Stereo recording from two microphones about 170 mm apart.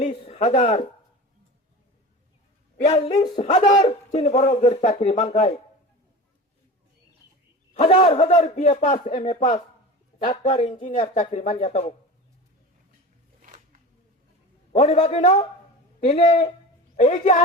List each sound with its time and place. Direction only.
0.0 s a sound: 40° left (ahead or behind)
3.1 s speech: 25° left (ahead or behind)
3.3 s a man's voice: 35° left (ahead or behind)
7.7 s a man's voice: 40° left (ahead or behind)
13.4 s a sound: 45° right (ahead or behind)
14.7 s a man's voice: 35° left (ahead or behind)